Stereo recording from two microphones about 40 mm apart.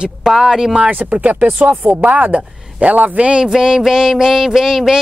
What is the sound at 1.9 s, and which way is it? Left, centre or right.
Speech, right.